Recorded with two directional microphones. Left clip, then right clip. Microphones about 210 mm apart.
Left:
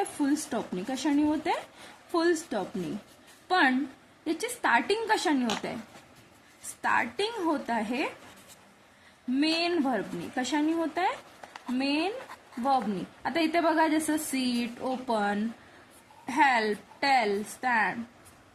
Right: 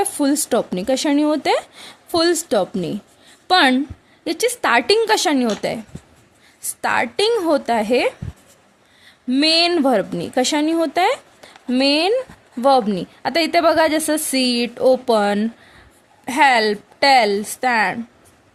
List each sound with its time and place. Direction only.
0.2 s a woman's voice: 50° right (ahead or behind)
6.8 s a woman's voice: 50° right (ahead or behind)
9.3 s a woman's voice: 50° right (ahead or behind)
13.2 s a woman's voice: 50° right (ahead or behind)